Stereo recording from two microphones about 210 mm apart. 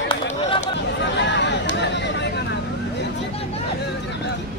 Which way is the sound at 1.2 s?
55° left (ahead or behind).